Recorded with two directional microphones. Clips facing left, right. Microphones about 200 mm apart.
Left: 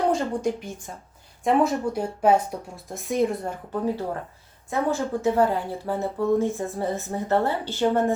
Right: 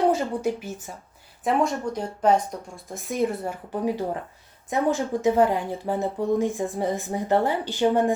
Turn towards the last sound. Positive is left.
turn(degrees=-15)  # may be behind; listen again after turning